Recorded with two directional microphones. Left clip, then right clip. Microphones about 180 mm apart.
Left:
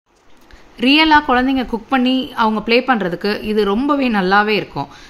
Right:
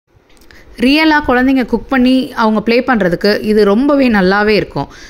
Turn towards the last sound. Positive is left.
turn(degrees=-30)  # may be behind; listen again after turning